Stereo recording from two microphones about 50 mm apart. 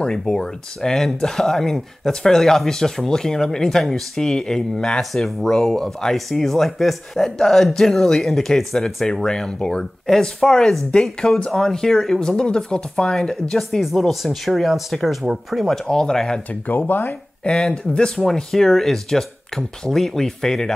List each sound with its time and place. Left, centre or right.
0.0 s speech: centre
15.7 s speech: centre
16.6 s speech: left
17.5 s speech: centre
18.1 s speech: centre